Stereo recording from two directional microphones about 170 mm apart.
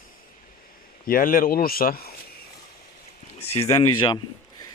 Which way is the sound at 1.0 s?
55° left (ahead or behind).